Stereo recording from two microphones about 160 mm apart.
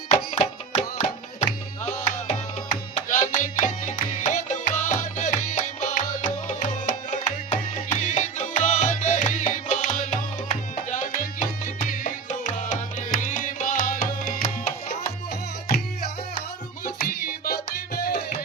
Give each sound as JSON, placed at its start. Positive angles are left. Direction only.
{"t": 0.3, "sound": "music", "side_deg": 40}
{"t": 16.8, "sound": "music", "side_deg": 65}